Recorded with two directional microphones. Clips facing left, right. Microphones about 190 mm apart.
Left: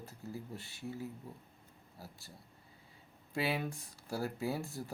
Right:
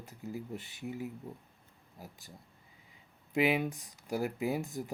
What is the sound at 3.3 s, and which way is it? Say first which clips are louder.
Speech: right 6 dB; 15° right (ahead or behind).